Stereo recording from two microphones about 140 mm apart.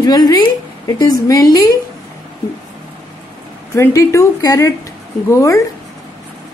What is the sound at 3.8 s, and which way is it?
A woman's voice, 20° left (ahead or behind).